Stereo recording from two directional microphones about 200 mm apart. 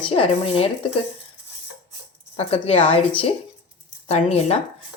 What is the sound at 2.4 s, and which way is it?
A woman's voice, 30° left (ahead or behind).